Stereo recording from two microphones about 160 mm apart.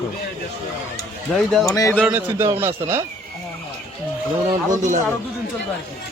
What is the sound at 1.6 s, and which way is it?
Speech, 20° left (ahead or behind).